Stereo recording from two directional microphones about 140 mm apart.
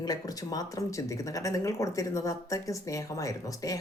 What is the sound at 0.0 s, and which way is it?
Speech, 25° left (ahead or behind).